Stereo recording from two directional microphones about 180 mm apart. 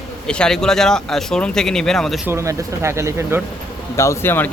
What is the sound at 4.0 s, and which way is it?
Speech, 15° left (ahead or behind).